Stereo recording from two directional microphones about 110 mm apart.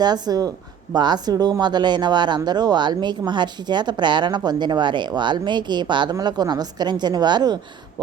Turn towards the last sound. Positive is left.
turn(degrees=-40)  # may be behind; listen again after turning